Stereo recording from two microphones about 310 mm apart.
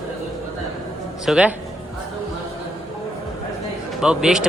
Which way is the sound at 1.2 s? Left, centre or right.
Centre.